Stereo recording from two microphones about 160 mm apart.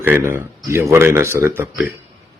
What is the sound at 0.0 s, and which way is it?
Speech, 15° right (ahead or behind).